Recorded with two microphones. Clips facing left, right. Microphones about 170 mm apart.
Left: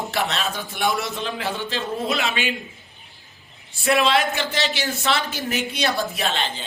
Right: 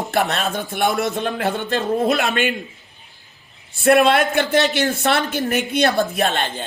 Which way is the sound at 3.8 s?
55° right (ahead or behind).